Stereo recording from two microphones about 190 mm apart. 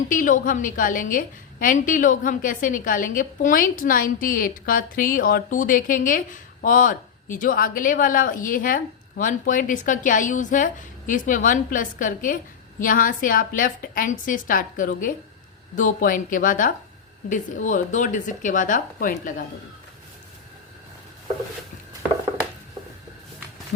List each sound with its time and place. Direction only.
0.1 s a woman's voice: 45° left (ahead or behind)